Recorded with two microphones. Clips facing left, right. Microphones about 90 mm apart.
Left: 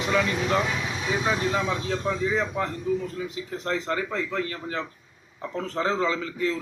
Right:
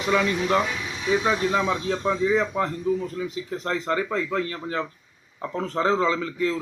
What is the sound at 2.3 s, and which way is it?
Speech, 35° right (ahead or behind).